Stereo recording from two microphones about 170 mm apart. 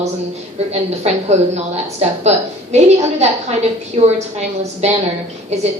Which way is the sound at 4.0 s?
30° right (ahead or behind).